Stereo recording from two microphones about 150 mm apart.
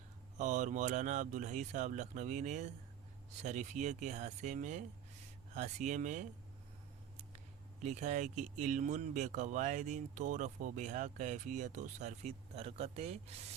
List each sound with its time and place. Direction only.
0.3 s speech: 55° right (ahead or behind)
7.8 s speech: 50° right (ahead or behind)